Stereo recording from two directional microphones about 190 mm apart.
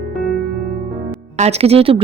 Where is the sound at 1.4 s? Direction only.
35° right (ahead or behind).